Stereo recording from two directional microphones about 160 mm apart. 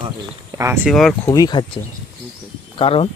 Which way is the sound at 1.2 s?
20° left (ahead or behind).